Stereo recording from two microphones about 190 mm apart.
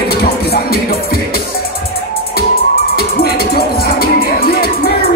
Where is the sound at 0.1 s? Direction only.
55° left (ahead or behind).